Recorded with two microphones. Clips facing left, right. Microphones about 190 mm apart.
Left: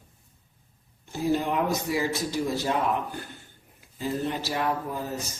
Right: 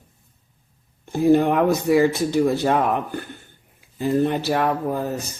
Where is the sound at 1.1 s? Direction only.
55° right (ahead or behind).